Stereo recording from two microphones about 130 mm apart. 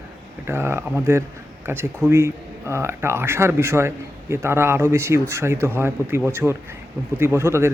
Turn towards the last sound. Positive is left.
turn(degrees=-20)  # may be behind; listen again after turning